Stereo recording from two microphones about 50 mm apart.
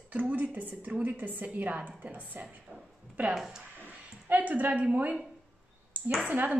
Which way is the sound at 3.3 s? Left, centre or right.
Centre.